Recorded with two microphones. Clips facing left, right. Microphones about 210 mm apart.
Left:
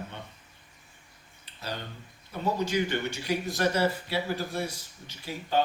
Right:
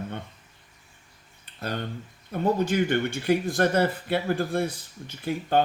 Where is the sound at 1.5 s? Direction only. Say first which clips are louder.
Right 9 dB; 55° right (ahead or behind).